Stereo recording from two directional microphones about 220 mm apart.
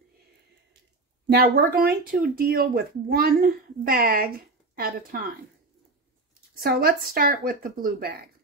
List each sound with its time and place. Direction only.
1.3 s speech: 45° right (ahead or behind)
6.6 s speech: 45° right (ahead or behind)